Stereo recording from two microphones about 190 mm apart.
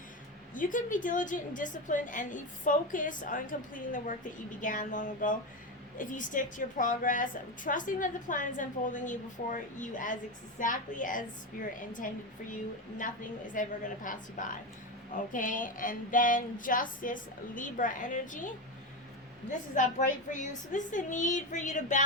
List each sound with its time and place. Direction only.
0.5 s a woman's voice: 45° left (ahead or behind)
19.7 s a woman's voice: 40° left (ahead or behind)